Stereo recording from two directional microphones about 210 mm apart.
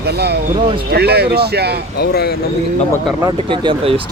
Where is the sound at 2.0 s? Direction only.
50° left (ahead or behind).